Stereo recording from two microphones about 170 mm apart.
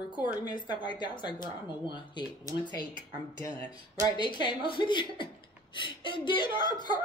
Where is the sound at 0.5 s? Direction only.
25° left (ahead or behind).